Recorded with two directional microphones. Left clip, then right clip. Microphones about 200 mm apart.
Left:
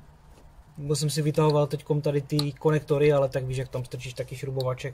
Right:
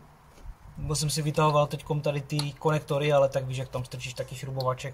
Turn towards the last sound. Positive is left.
turn(degrees=40)  # may be behind; listen again after turning